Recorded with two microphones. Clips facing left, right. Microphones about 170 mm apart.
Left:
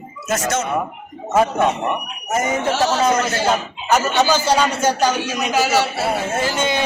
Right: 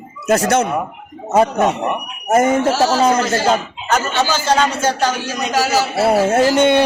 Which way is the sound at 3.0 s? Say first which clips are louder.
Right 3 dB; 30° right (ahead or behind).